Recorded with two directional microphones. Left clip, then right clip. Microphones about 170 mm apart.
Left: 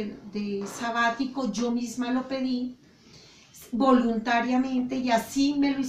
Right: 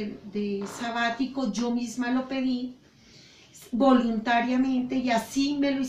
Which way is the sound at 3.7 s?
5° right (ahead or behind).